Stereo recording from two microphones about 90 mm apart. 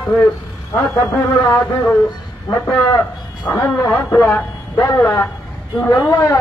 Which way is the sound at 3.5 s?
35° left (ahead or behind).